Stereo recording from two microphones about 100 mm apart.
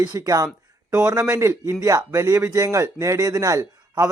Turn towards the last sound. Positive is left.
turn(degrees=-35)  # may be behind; listen again after turning